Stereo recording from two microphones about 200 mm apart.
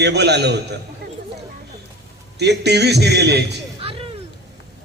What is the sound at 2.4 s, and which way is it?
A man's voice, 55° right (ahead or behind).